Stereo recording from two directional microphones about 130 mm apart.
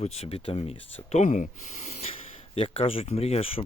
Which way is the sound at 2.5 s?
50° left (ahead or behind).